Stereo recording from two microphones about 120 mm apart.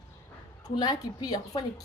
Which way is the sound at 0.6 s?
35° left (ahead or behind).